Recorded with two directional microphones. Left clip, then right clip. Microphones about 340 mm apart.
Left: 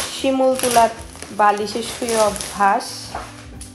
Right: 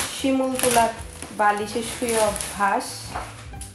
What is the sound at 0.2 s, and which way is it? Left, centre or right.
Speech, left.